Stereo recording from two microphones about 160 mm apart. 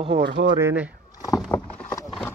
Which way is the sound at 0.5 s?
15° right (ahead or behind).